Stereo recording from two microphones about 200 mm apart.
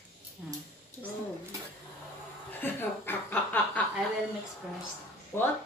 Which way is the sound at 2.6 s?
10° left (ahead or behind).